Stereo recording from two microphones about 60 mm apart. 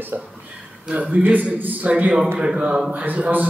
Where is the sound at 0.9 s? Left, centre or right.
Centre.